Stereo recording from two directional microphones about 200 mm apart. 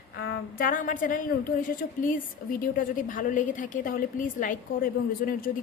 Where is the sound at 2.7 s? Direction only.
45° left (ahead or behind).